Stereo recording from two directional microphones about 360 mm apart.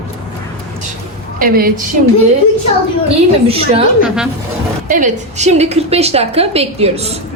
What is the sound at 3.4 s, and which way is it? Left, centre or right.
Speech, centre.